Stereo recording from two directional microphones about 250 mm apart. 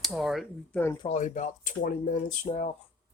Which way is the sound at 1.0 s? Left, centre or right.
Left.